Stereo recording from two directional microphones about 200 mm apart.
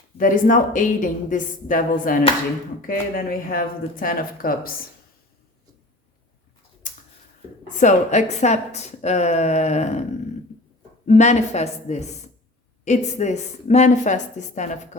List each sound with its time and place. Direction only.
0.2 s a woman's voice: 45° left (ahead or behind)
7.8 s a woman's voice: 35° left (ahead or behind)
11.0 s a woman's voice: 35° left (ahead or behind)